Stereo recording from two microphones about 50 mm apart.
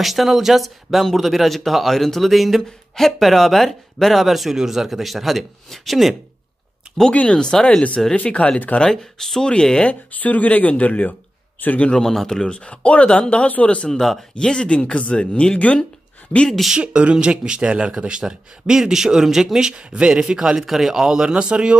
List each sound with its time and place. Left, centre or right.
0.0 s speech: centre
7.2 s speech: centre
8.7 s speech: centre
9.8 s speech: left
11.9 s speech: centre
12.4 s speech: left
13.9 s speech: centre
14.3 s speech: centre
16.7 s speech: centre
19.7 s speech: centre